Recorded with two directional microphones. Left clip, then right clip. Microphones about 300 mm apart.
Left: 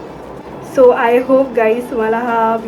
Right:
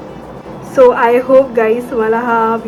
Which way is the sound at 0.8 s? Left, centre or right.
Centre.